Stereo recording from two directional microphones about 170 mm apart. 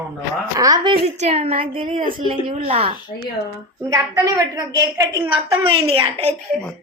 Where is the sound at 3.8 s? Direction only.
20° right (ahead or behind).